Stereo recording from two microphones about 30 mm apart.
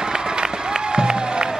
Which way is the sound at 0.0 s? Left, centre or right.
Right.